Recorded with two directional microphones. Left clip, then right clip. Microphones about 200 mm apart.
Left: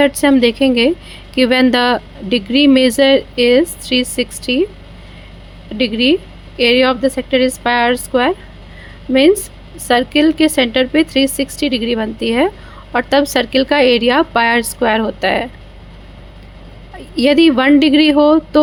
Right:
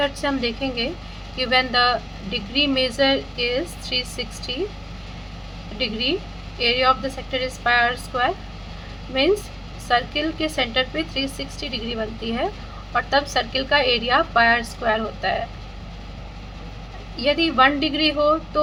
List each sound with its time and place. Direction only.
0.0 s speech: 55° left (ahead or behind)
5.7 s speech: 50° left (ahead or behind)
17.2 s speech: 55° left (ahead or behind)